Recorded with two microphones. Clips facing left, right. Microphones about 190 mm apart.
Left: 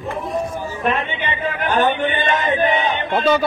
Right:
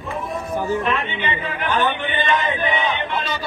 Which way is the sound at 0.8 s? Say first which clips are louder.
Left 2 dB; 45° left (ahead or behind).